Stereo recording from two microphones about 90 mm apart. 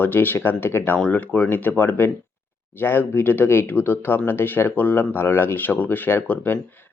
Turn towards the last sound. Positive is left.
turn(degrees=20)  # may be behind; listen again after turning